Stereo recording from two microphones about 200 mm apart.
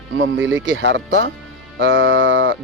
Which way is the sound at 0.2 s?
70° right (ahead or behind).